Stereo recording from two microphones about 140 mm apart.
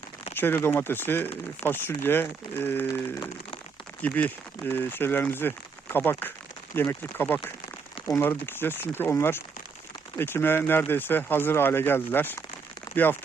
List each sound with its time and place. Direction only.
0.3 s speech: 15° left (ahead or behind)